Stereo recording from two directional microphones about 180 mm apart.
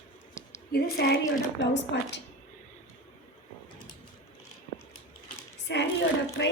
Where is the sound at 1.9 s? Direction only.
75° left (ahead or behind).